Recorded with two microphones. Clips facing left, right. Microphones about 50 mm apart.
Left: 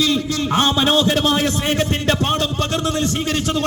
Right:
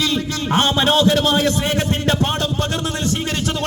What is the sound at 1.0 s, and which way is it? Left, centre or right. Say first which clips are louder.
Speech: right 2 dB; left.